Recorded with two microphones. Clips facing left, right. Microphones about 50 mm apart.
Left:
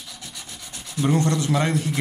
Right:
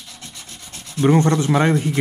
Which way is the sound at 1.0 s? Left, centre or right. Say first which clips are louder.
Right 6 dB; right.